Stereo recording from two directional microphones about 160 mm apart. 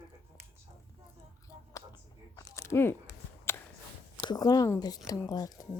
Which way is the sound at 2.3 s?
20° left (ahead or behind).